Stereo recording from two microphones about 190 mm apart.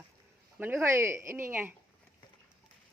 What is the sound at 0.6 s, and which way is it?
Speech, 10° right (ahead or behind).